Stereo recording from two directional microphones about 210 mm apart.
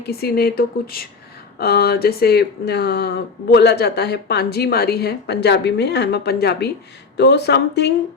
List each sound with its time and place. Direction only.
0.0 s speech: 50° left (ahead or behind)